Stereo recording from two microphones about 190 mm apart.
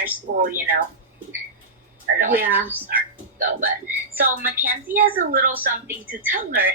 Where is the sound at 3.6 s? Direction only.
10° right (ahead or behind).